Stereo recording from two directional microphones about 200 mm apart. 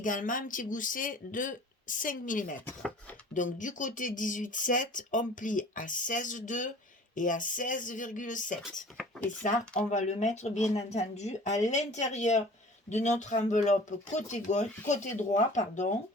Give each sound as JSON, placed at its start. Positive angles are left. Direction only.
{"t": 0.0, "sound": "speech", "side_deg": 40}
{"t": 2.6, "sound": "speech", "side_deg": 10}
{"t": 3.3, "sound": "speech", "side_deg": 40}
{"t": 9.9, "sound": "speech", "side_deg": 35}